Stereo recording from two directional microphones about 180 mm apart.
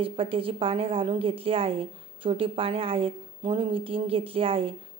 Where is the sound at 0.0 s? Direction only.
30° right (ahead or behind).